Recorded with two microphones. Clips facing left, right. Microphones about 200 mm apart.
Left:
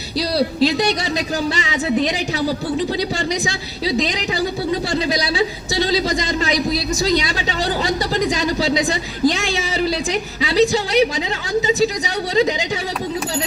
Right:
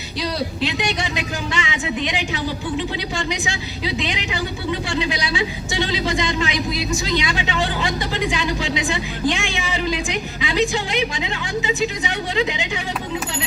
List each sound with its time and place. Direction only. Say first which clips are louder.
0.2 s a woman's voice: left 6 dB; 35° left (ahead or behind)